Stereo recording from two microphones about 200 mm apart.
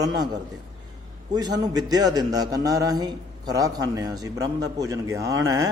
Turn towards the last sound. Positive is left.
turn(degrees=-20)  # may be behind; listen again after turning